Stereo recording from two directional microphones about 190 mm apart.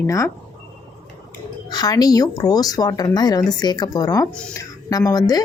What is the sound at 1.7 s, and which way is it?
Speech, 20° left (ahead or behind).